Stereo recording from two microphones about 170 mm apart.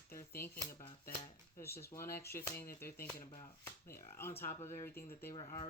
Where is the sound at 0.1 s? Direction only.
15° left (ahead or behind).